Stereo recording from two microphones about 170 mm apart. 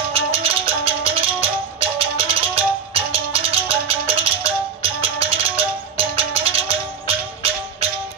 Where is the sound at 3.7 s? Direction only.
35° right (ahead or behind).